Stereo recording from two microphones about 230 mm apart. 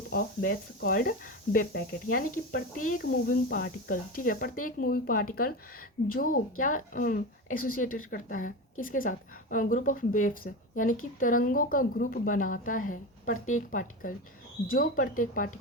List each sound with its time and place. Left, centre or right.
0.1 s speech: left